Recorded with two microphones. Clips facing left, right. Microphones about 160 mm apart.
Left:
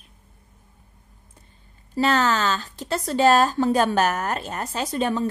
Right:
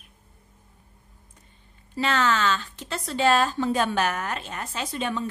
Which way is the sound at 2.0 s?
40° left (ahead or behind).